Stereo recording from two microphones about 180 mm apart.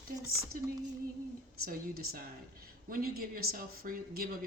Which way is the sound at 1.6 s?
55° right (ahead or behind).